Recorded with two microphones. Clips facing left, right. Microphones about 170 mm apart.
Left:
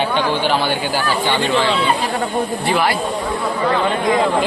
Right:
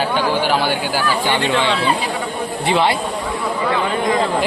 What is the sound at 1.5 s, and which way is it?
Speech, centre (ahead or behind).